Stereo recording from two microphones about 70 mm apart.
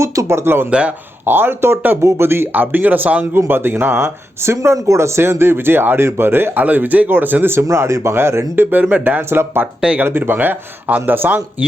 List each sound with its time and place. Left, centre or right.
0.0 s speech: right
0.7 s speech: centre
1.2 s speech: right
2.5 s speech: right
7.7 s speech: right
8.7 s speech: centre